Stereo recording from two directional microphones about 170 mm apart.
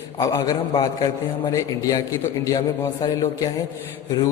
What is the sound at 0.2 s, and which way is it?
A man's voice, 20° left (ahead or behind).